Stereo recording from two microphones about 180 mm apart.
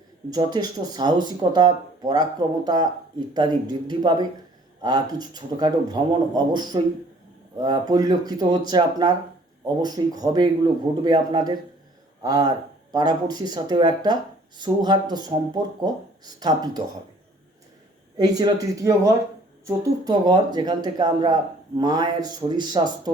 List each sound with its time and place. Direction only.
0.3 s speech: 25° right (ahead or behind)
18.2 s speech: 20° right (ahead or behind)